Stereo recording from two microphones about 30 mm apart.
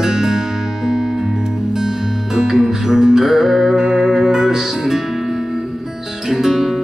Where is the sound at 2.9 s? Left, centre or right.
Centre.